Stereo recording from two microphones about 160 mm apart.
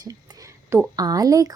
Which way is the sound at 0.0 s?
20° right (ahead or behind).